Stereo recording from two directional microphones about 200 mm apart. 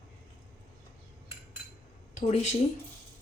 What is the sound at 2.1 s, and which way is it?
Speech, 35° left (ahead or behind).